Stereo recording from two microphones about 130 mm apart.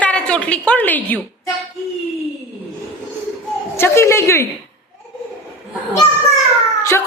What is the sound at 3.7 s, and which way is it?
Speech, 20° left (ahead or behind).